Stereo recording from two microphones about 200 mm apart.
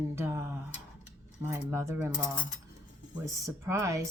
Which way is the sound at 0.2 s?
15° right (ahead or behind).